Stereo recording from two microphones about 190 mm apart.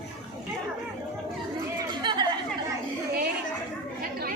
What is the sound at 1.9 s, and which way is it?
Chatter, 25° right (ahead or behind).